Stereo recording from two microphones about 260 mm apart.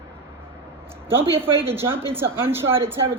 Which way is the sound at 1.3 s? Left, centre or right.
Centre.